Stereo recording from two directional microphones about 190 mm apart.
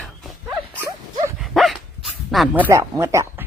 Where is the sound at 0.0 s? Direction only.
5° left (ahead or behind).